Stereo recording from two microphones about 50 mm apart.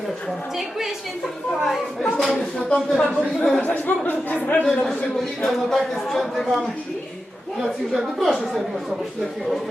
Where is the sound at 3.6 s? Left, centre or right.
Left.